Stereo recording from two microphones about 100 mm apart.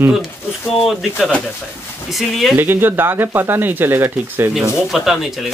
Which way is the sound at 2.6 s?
20° right (ahead or behind).